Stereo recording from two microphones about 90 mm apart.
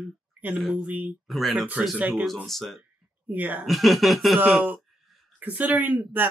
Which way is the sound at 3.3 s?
20° right (ahead or behind).